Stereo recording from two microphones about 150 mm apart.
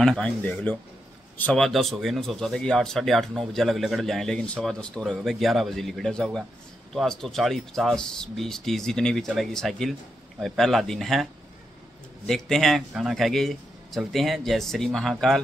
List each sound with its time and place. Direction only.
0.0 s speech: 5° left (ahead or behind)
12.3 s speech: centre (ahead or behind)